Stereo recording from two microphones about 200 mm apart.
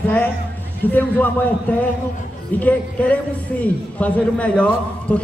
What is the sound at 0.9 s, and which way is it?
A man's voice, 10° left (ahead or behind).